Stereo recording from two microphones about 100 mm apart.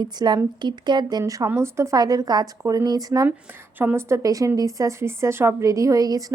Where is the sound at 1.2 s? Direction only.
35° right (ahead or behind).